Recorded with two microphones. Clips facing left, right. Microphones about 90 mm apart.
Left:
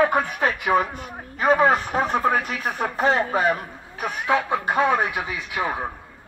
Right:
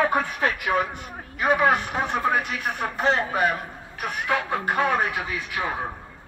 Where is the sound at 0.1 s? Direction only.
25° left (ahead or behind).